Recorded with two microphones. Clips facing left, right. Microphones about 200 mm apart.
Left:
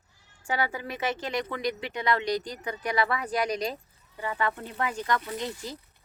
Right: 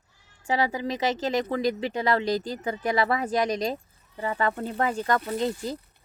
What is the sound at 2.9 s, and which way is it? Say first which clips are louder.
Speech: right 3 dB; 40° right (ahead or behind).